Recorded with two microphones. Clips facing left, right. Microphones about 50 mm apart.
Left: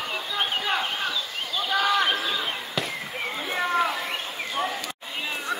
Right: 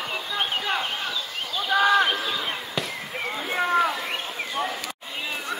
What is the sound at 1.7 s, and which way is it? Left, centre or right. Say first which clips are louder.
Basketball bounce: right 3 dB; centre.